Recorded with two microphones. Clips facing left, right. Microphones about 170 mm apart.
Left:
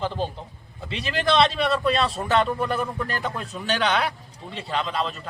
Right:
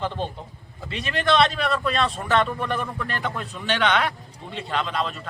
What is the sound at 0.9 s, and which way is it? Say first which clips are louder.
Speech: right 1 dB; 30° left (ahead or behind).